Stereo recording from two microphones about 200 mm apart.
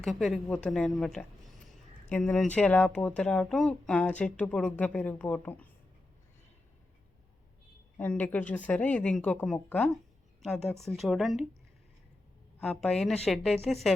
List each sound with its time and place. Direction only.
0.0 s speech: centre (ahead or behind)
7.9 s speech: 5° left (ahead or behind)
12.5 s speech: 5° left (ahead or behind)